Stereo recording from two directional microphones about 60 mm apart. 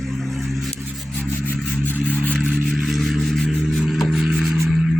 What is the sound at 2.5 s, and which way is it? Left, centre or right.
Vehicle, centre.